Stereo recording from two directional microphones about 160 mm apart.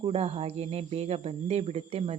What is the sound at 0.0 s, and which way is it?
Speech, 35° right (ahead or behind).